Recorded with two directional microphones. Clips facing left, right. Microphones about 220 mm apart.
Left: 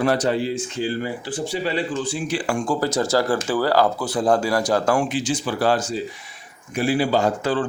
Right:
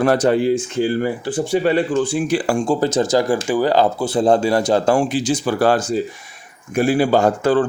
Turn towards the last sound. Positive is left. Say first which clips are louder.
# right 5 dB
turn(degrees=-50)  # may be behind; listen again after turning